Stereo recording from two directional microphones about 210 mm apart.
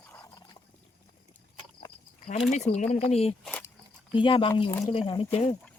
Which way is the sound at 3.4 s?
5° left (ahead or behind).